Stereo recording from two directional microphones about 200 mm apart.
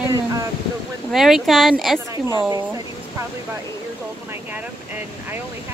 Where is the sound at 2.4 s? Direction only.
15° right (ahead or behind).